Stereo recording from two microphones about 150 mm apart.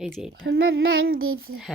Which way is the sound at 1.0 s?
80° right.